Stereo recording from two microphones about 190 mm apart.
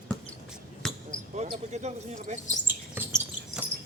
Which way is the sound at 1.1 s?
35° right (ahead or behind).